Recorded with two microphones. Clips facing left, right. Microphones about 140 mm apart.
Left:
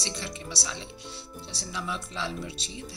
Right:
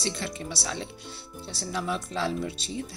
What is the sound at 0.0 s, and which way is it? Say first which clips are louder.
Speech: right 4 dB; 45° right (ahead or behind).